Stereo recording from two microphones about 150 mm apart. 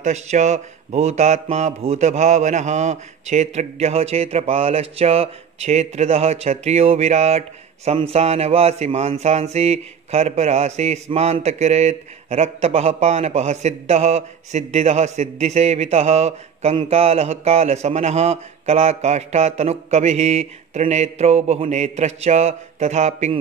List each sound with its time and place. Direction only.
0.0 s speech: 50° right (ahead or behind)